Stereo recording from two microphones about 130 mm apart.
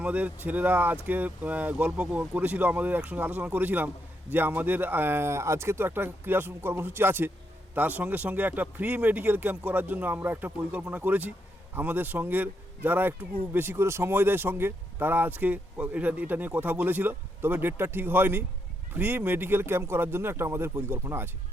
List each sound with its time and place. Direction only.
0.0 s a man's voice: 10° right (ahead or behind)